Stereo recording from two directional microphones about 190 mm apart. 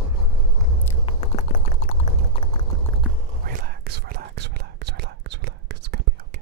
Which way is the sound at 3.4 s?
50° right (ahead or behind).